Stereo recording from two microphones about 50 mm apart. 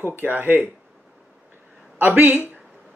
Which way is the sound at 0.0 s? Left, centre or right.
Right.